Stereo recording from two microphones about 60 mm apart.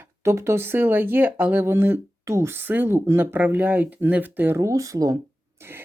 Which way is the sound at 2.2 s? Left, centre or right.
Right.